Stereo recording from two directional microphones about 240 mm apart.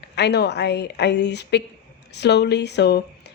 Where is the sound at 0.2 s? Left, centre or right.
Left.